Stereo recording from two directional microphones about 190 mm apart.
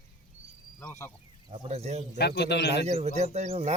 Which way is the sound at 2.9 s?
35° right (ahead or behind).